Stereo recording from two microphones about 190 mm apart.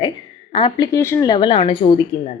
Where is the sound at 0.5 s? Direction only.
25° left (ahead or behind).